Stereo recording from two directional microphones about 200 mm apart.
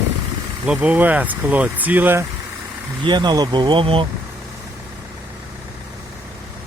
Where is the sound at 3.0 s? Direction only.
20° right (ahead or behind).